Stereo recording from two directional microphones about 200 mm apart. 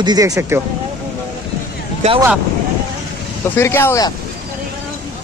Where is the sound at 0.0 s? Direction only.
20° right (ahead or behind).